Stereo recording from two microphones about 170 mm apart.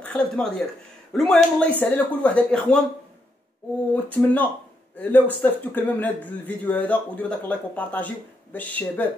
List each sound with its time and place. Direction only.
0.0 s speech: 10° left (ahead or behind)
3.9 s speech: 10° left (ahead or behind)